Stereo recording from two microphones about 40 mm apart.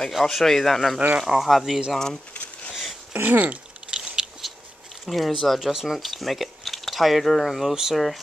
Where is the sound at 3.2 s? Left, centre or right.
Right.